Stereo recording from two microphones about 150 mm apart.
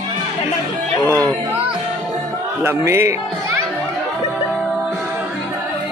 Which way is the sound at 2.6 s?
15° right (ahead or behind).